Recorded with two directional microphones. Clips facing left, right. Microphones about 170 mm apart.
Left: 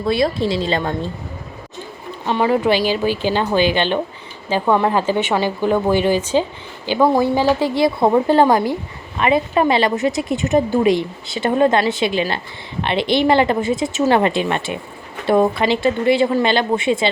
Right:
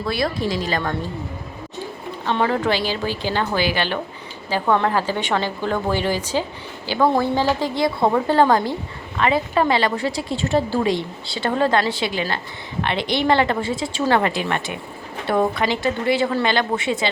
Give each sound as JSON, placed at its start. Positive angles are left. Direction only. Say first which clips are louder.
{"t": 0.0, "sound": "a woman's voice", "louder": "left 5 dB", "side_deg": 25}
{"t": 2.2, "sound": "a woman's voice", "louder": "left 4 dB", "side_deg": 15}